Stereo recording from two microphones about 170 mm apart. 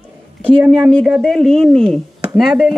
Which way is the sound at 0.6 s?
5° right (ahead or behind).